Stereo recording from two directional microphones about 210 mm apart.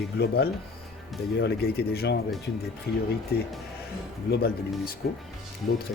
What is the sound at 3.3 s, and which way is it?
Speech, 50° left (ahead or behind).